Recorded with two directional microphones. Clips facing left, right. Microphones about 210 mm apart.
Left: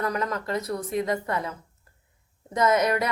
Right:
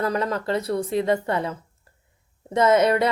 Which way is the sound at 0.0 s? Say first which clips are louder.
Right 4 dB; 30° right (ahead or behind).